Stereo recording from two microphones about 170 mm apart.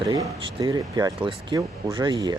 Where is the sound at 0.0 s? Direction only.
20° right (ahead or behind).